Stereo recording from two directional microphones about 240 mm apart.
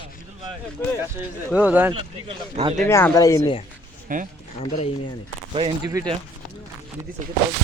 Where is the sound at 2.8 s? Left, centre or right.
Centre.